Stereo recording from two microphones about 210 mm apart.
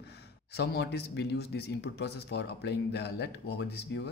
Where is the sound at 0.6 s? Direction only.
50° left (ahead or behind).